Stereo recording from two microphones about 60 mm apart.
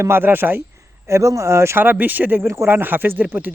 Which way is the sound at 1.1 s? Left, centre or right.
Right.